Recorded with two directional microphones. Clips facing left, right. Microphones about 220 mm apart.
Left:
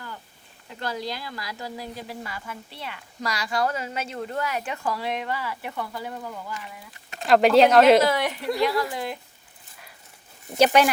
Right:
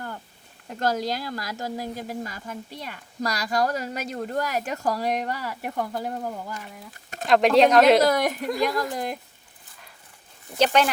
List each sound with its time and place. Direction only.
0.7 s speech: 45° right (ahead or behind)
7.3 s a woman's voice: centre (ahead or behind)
8.0 s speech: 45° right (ahead or behind)
10.6 s speech: 10° left (ahead or behind)